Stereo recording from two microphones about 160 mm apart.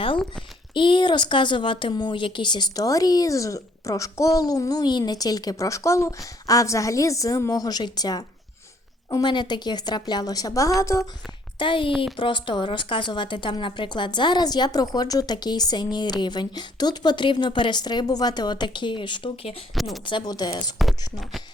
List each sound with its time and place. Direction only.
0.7 s a woman's voice: 30° left (ahead or behind)
11.6 s a woman's voice: 30° left (ahead or behind)
19.7 s speech: centre (ahead or behind)
20.1 s a woman's voice: 30° left (ahead or behind)